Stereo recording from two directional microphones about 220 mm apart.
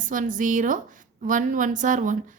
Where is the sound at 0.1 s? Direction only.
35° right (ahead or behind).